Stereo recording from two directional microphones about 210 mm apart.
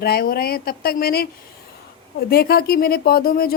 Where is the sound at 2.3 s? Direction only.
50° left (ahead or behind).